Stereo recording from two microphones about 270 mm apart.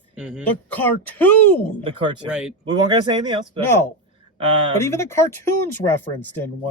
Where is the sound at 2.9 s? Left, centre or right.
Centre.